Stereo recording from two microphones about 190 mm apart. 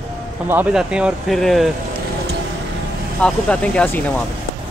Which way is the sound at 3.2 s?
5° left (ahead or behind).